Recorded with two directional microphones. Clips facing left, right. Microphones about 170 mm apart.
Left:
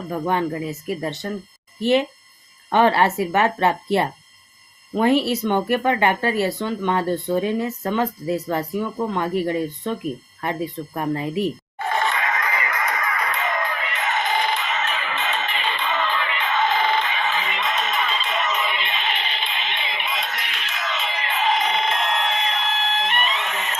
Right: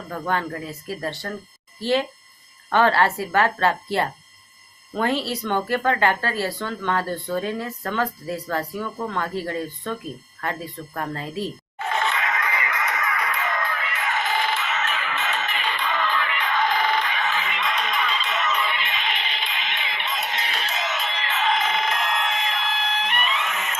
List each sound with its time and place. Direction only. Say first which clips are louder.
0.1 s speech: left 4 dB; 20° left (ahead or behind)
11.9 s music: left 2 dB; 35° left (ahead or behind)
13.4 s music: left 2 dB; 15° left (ahead or behind)
20.3 s music: right 3 dB; 35° right (ahead or behind)
21.0 s music: left 5 dB; 10° left (ahead or behind); by 23.7 s 35° left (ahead or behind)